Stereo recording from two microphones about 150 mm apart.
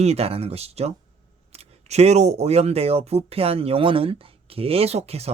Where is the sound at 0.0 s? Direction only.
45° right (ahead or behind).